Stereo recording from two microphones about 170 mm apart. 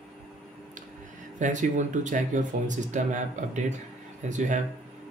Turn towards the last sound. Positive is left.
turn(degrees=-45)  # may be behind; listen again after turning